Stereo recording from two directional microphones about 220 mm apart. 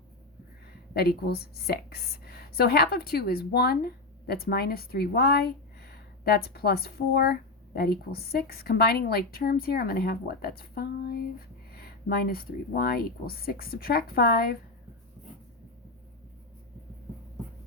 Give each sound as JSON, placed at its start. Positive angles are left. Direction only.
{"t": 0.9, "sound": "a woman's voice", "side_deg": 45}